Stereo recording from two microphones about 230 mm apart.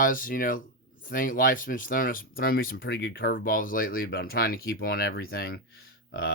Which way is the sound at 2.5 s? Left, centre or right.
Left.